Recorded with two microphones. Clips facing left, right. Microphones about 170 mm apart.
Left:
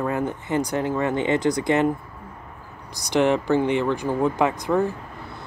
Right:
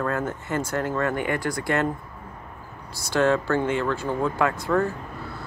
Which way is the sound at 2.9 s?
15° left (ahead or behind).